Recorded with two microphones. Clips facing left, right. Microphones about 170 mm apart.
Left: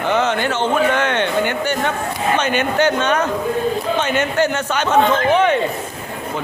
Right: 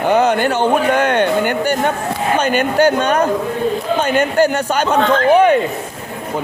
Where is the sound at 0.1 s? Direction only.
40° right (ahead or behind).